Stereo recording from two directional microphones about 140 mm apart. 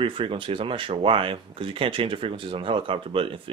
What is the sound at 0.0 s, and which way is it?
Speech, 40° right (ahead or behind).